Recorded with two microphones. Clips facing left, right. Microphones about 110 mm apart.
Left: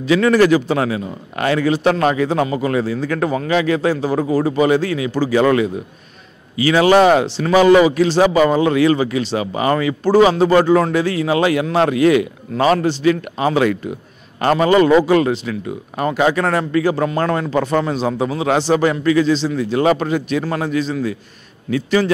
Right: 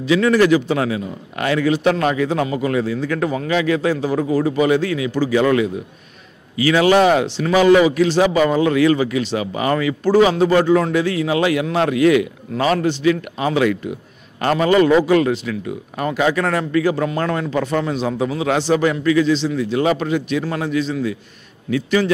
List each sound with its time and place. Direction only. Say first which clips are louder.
0.0 s speech: left 2 dB; 50° left (ahead or behind)
6.5 s speech: left 2 dB; 30° left (ahead or behind)